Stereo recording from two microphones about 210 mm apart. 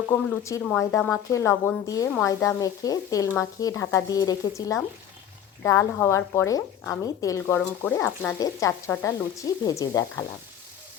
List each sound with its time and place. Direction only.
0.1 s a woman's voice: 15° left (ahead or behind)